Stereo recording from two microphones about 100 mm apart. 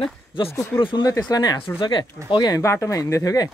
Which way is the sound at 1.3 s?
40° left (ahead or behind).